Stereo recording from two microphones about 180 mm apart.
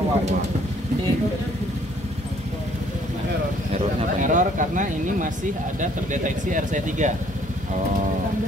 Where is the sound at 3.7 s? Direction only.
45° right (ahead or behind).